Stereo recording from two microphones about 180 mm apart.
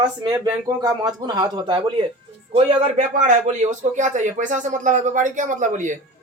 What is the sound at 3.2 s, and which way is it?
A man's voice, 40° right (ahead or behind).